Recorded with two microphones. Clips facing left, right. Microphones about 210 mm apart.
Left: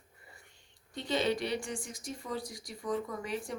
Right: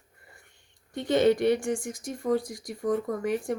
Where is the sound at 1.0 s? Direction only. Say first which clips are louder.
Right 9 dB; 50° right (ahead or behind).